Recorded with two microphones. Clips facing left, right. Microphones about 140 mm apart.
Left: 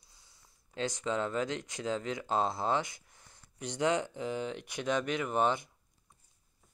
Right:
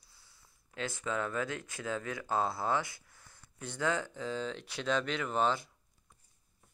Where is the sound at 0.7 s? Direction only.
25° left (ahead or behind).